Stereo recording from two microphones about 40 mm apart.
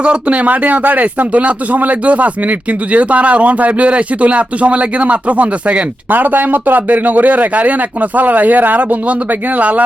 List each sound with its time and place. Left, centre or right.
0.0 s speech: right
6.1 s speech: right